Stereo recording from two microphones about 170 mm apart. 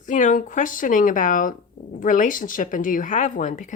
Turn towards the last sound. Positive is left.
turn(degrees=50)  # may be behind; listen again after turning